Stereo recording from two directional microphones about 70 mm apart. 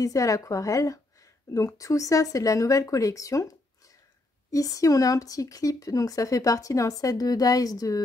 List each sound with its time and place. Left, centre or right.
0.0 s speech: left